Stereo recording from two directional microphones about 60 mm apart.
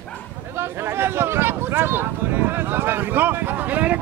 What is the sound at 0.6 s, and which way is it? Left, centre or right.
Speech, right.